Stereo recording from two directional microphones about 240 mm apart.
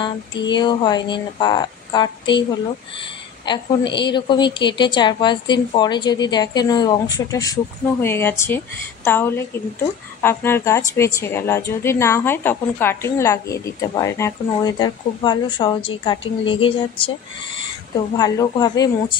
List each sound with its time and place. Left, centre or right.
0.0 s a woman's voice: centre
3.4 s a woman's voice: centre
18.1 s a woman's voice: centre